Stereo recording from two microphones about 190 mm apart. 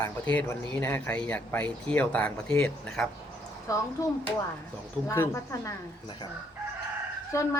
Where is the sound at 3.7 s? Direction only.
15° left (ahead or behind).